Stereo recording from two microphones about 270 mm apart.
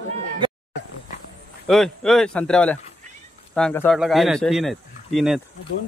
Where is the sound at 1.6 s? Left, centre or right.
Centre.